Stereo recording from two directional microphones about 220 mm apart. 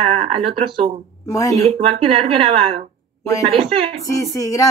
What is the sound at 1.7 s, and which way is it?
Speech, 25° right (ahead or behind).